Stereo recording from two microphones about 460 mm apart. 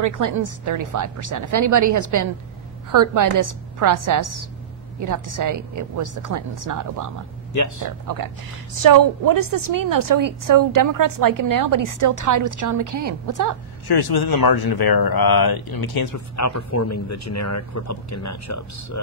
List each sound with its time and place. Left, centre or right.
0.0 s a woman's voice: right
13.8 s speech: left
16.3 s speech: left